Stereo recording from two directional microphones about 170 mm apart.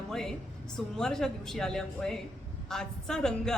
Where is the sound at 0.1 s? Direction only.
5° left (ahead or behind).